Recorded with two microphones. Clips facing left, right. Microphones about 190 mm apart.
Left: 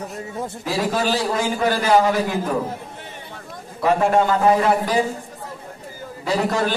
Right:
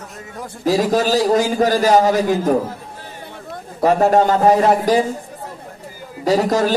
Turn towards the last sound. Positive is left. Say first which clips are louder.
# right 5 dB
turn(degrees=-40)  # may be behind; listen again after turning